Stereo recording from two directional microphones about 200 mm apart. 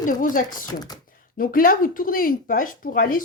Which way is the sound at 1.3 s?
45° left (ahead or behind).